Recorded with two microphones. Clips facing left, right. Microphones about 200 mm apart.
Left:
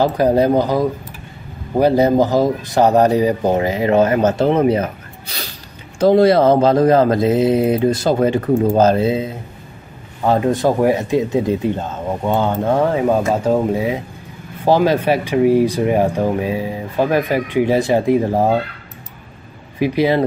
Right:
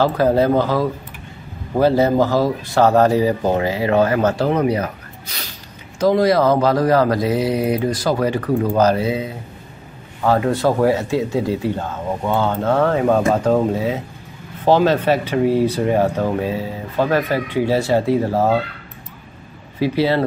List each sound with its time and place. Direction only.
0.0 s speech: 15° left (ahead or behind)
19.8 s speech: 15° left (ahead or behind)